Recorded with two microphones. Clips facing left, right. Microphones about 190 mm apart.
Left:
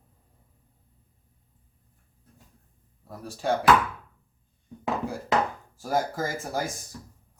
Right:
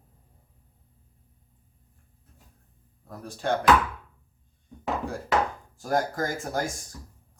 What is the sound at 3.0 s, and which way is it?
Speech, 5° left (ahead or behind).